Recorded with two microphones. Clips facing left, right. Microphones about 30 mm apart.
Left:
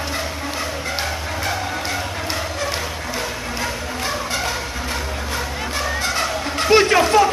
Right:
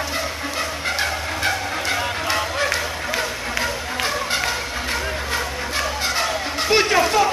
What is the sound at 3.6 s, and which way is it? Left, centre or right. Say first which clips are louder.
Music: right 2 dB; centre.